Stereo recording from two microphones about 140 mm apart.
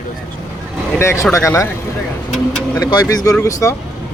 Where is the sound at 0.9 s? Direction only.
20° left (ahead or behind).